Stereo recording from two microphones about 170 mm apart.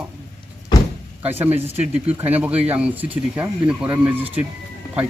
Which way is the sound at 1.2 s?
10° right (ahead or behind).